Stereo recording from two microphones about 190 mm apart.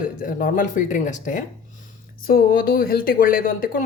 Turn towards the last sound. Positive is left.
turn(degrees=45)  # may be behind; listen again after turning